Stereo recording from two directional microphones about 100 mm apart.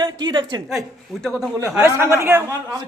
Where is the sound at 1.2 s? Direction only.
5° left (ahead or behind).